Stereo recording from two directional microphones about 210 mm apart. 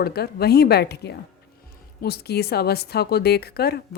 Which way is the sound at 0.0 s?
50° left (ahead or behind).